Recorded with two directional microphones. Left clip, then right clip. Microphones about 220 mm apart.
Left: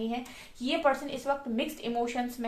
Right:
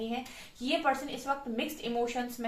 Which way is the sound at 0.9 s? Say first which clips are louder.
Left 2 dB; 45° left (ahead or behind).